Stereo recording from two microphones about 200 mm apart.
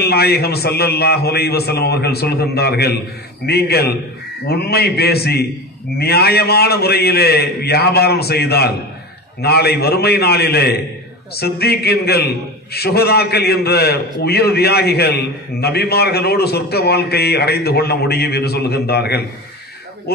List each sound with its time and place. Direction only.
0.0 s a man's voice: 50° left (ahead or behind)